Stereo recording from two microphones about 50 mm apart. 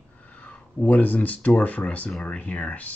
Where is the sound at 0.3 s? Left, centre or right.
Left.